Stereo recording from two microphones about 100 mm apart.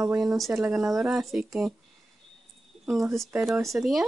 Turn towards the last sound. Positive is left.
turn(degrees=0)  # may be behind; listen again after turning